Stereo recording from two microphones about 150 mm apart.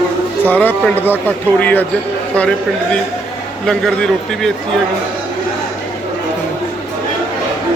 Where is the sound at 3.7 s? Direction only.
5° left (ahead or behind).